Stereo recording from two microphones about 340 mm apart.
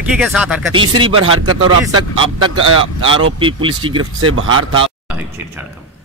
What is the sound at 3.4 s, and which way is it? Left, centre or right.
Speech, centre.